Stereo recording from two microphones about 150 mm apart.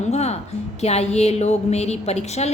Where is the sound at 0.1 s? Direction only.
45° left (ahead or behind).